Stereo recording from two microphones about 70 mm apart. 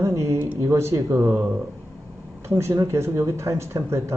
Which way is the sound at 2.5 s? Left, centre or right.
Right.